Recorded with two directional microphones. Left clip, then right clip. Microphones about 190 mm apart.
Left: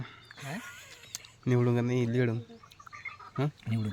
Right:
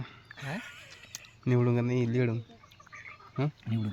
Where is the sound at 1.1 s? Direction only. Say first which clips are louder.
Left 2 dB; 5° left (ahead or behind).